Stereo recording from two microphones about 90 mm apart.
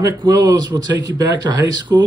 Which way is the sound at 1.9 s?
30° right (ahead or behind).